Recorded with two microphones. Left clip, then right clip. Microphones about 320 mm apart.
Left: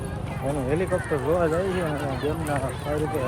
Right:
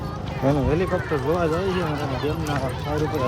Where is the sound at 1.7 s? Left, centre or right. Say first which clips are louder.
Right 2 dB; right.